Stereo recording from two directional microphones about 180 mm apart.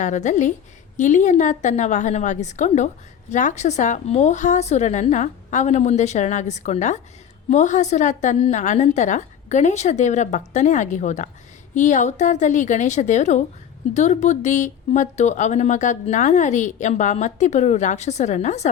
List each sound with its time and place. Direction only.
0.0 s a woman's voice: 40° left (ahead or behind)